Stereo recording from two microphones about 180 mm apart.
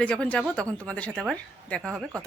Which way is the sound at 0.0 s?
5° left (ahead or behind).